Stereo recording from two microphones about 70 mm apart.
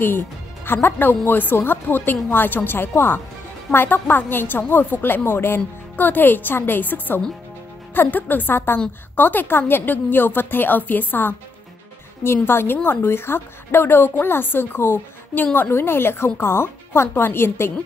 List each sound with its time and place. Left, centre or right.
0.8 s a woman's voice: left
12.4 s a woman's voice: left